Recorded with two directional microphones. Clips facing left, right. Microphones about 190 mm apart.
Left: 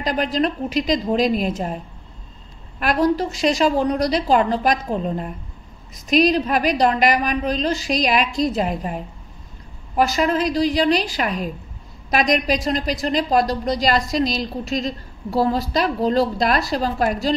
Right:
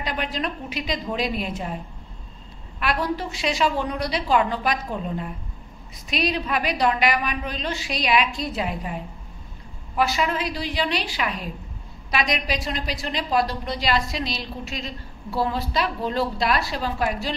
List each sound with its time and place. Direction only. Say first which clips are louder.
0.0 s a woman's voice: left 7 dB; 40° left (ahead or behind)
2.8 s a woman's voice: left 7 dB; 40° left (ahead or behind)